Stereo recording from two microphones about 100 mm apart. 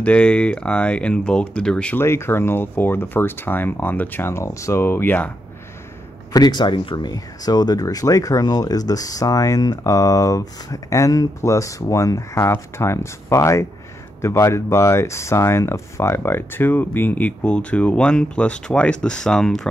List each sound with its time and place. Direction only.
0.0 s speech: 10° left (ahead or behind)
2.0 s speech: 25° left (ahead or behind)
6.3 s speech: 45° left (ahead or behind); by 19.7 s 5° left (ahead or behind)